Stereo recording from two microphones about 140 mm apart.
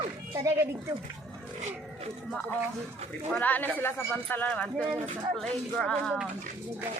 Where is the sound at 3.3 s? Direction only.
10° left (ahead or behind).